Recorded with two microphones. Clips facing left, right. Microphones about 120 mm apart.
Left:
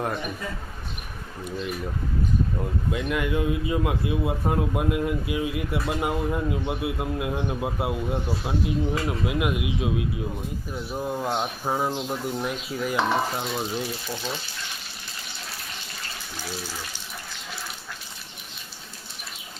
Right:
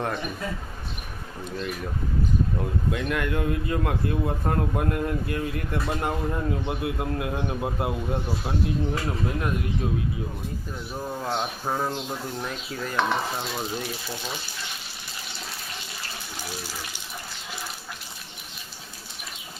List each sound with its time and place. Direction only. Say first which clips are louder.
1.5 s speech: left 1 dB; 5° left (ahead or behind)
2.9 s speech: left 3 dB; 5° left (ahead or behind)
13.4 s speech: left 2 dB; centre (ahead or behind)